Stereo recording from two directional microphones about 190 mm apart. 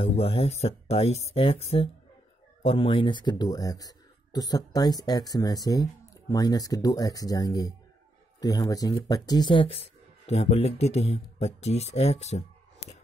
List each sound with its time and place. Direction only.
0.0 s speech: 30° left (ahead or behind)